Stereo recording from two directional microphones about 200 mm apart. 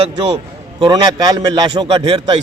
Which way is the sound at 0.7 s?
25° right (ahead or behind).